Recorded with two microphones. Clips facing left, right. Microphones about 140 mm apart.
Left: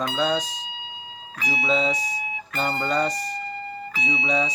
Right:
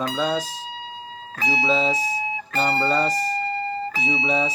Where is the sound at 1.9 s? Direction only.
30° right (ahead or behind).